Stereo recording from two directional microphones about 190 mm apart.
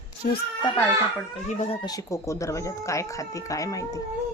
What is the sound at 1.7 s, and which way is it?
Speech, 25° left (ahead or behind).